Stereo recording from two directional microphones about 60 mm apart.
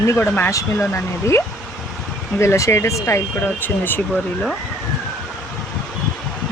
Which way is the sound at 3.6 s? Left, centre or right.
Left.